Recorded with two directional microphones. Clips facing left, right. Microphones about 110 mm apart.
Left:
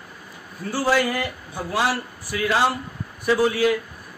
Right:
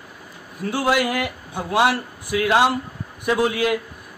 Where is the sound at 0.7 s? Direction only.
15° right (ahead or behind).